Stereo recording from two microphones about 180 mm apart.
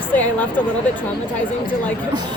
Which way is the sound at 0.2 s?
10° left (ahead or behind).